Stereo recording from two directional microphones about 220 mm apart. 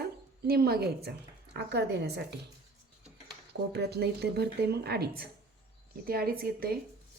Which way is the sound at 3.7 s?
50° right (ahead or behind).